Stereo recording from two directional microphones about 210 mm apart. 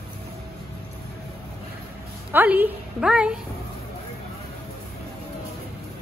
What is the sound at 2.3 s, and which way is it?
A woman's voice, 10° right (ahead or behind).